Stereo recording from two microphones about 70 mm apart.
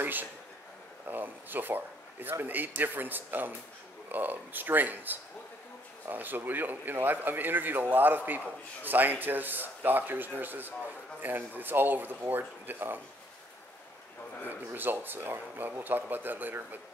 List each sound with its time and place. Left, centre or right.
0.0 s a sound: right
1.0 s speech: right
14.4 s speech: right